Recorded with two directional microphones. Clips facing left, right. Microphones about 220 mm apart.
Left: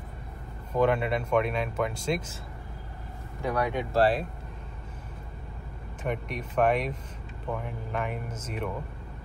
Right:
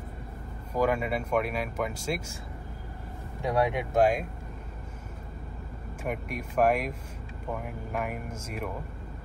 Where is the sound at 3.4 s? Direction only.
20° right (ahead or behind).